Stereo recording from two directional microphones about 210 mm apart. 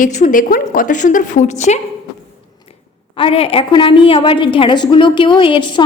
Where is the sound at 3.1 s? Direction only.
25° left (ahead or behind).